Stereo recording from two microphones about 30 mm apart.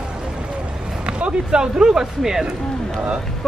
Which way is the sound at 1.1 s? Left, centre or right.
Right.